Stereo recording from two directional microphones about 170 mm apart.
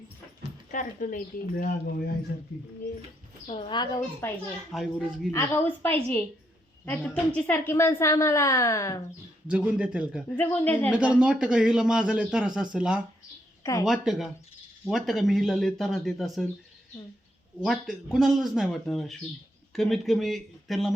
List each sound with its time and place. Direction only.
0.7 s speech: 55° left (ahead or behind)
3.4 s a woman's voice: 35° left (ahead or behind)
4.2 s a woman's voice: 15° left (ahead or behind)
4.7 s speech: centre (ahead or behind)
5.3 s a woman's voice: 15° left (ahead or behind)
9.5 s a man's voice: 5° right (ahead or behind)
10.3 s a woman's voice: 10° left (ahead or behind)
10.9 s speech: 5° right (ahead or behind)
17.6 s speech: centre (ahead or behind)